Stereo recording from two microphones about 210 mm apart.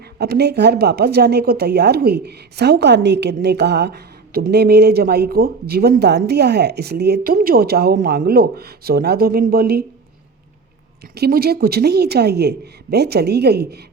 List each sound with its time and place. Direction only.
0.2 s speech: 50° right (ahead or behind)
11.1 s speech: 50° right (ahead or behind)